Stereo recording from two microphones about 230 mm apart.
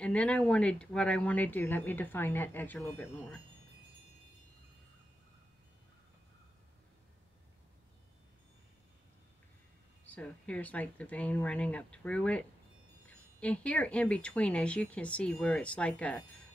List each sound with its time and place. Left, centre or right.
0.0 s speech: centre
10.0 s speech: centre